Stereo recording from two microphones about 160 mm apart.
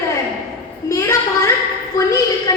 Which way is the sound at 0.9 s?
20° left (ahead or behind).